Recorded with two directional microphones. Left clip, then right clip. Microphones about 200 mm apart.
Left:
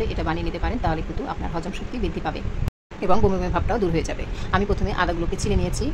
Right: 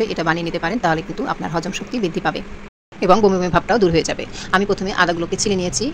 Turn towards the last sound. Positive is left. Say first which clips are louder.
# right 6 dB
turn(degrees=-15)  # may be behind; listen again after turning